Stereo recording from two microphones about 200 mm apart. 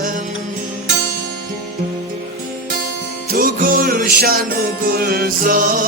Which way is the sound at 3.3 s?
45° right (ahead or behind).